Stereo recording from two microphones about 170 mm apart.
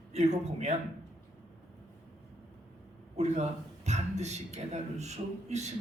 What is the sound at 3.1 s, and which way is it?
A man's voice, 40° right (ahead or behind).